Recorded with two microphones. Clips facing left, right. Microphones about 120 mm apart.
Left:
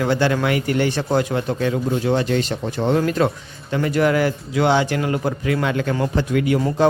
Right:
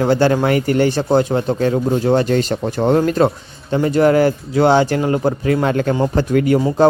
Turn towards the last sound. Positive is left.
turn(degrees=-40)  # may be behind; listen again after turning